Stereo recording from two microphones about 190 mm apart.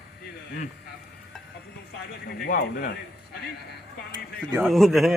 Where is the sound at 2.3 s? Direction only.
55° left (ahead or behind).